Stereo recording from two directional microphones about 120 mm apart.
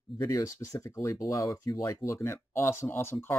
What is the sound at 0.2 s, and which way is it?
Speech, 30° left (ahead or behind).